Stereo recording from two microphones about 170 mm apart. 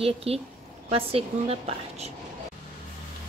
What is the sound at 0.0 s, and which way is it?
A woman's voice, 35° right (ahead or behind).